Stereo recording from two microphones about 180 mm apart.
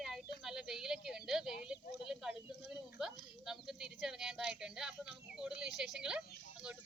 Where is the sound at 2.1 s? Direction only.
5° right (ahead or behind).